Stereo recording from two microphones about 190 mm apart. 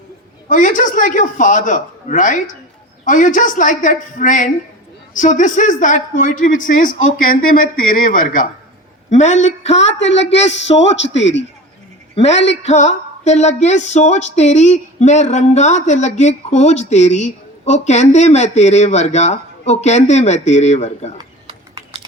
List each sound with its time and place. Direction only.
0.4 s a man's voice: 45° left (ahead or behind)
9.7 s a man's voice: 75° left (ahead or behind)
12.6 s speech: 35° left (ahead or behind)
21.2 s a sound: 20° right (ahead or behind)